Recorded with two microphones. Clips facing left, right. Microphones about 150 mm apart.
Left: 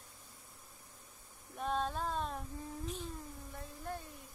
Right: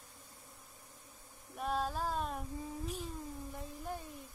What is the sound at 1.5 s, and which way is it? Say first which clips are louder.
Female singing: even; 5° right (ahead or behind).